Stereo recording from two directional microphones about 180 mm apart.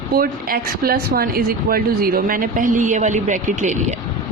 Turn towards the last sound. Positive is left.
turn(degrees=-45)  # may be behind; listen again after turning